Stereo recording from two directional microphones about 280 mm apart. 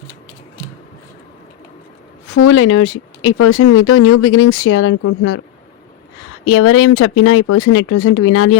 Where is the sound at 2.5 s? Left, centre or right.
Left.